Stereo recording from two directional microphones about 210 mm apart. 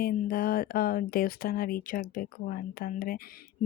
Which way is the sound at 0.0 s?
45° left (ahead or behind).